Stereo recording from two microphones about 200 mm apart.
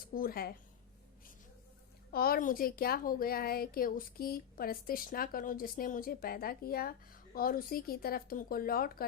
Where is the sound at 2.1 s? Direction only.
50° left (ahead or behind).